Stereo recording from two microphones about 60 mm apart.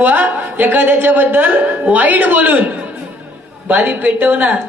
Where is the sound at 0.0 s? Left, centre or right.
Right.